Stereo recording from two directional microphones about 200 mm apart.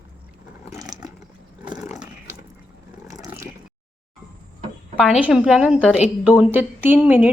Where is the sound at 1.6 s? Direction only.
20° right (ahead or behind).